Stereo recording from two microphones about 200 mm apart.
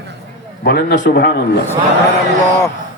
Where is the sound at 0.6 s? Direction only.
60° left (ahead or behind).